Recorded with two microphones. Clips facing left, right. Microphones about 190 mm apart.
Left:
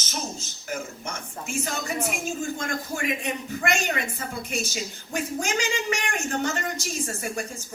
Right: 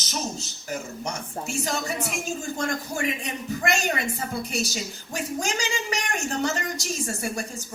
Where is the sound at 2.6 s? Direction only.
35° right (ahead or behind).